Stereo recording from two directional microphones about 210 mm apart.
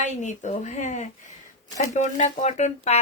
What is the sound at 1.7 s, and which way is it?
Speech, 35° left (ahead or behind).